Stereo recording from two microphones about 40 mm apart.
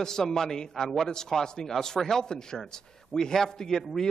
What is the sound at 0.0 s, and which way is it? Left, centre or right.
A man's voice, centre.